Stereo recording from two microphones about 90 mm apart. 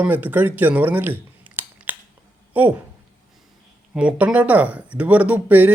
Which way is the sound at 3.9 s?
10° right (ahead or behind).